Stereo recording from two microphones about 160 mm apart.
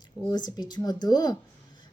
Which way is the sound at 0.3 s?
25° left (ahead or behind).